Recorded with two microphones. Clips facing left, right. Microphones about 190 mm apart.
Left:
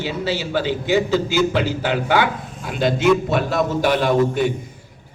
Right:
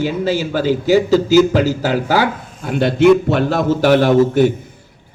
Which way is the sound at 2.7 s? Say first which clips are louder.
Right 6 dB; 60° right (ahead or behind).